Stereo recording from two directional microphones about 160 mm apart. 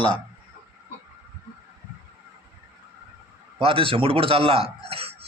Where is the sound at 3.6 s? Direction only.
35° right (ahead or behind).